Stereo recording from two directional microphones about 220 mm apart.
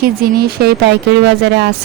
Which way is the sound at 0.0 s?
45° right (ahead or behind).